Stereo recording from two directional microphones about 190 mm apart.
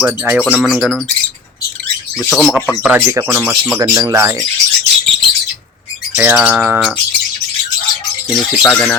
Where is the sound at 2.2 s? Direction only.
Centre (ahead or behind); by 4.3 s 15° right (ahead or behind).